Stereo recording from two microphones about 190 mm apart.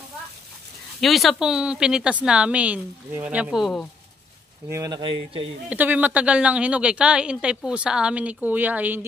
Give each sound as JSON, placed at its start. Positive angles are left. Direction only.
{"t": 1.0, "sound": "a woman's voice", "side_deg": 0}
{"t": 4.6, "sound": "speech", "side_deg": -15}
{"t": 5.7, "sound": "a woman's voice", "side_deg": -10}